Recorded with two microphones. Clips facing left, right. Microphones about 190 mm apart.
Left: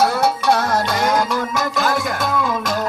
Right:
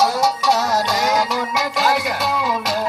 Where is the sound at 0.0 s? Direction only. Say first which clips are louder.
Left 1 dB; 55° left (ahead or behind).